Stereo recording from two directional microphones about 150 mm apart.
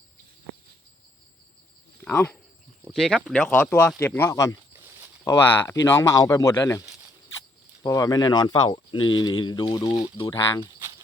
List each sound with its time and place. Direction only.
2.0 s speech: 15° left (ahead or behind)
2.8 s speech: centre (ahead or behind); by 10.7 s 25° left (ahead or behind)